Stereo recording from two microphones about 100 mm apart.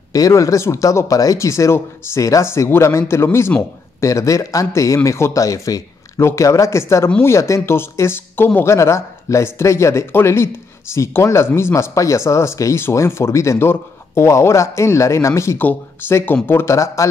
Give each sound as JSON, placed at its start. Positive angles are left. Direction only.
{"t": 0.1, "sound": "a man's voice", "side_deg": 35}